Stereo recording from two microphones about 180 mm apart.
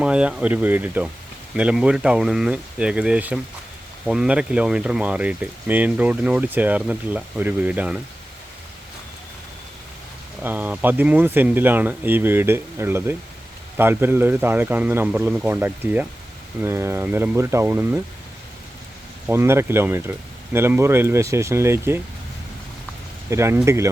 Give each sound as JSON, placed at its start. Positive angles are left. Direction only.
{"t": 0.0, "sound": "speech", "side_deg": -5}
{"t": 10.4, "sound": "speech", "side_deg": -10}
{"t": 19.3, "sound": "speech", "side_deg": -15}
{"t": 23.3, "sound": "speech", "side_deg": -15}